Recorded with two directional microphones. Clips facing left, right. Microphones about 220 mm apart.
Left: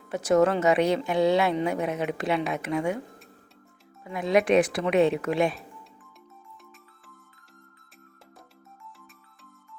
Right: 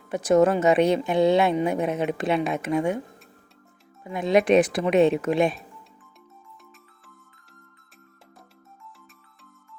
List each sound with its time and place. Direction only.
0.1 s a woman's voice: 15° right (ahead or behind)
4.0 s a woman's voice: 25° right (ahead or behind)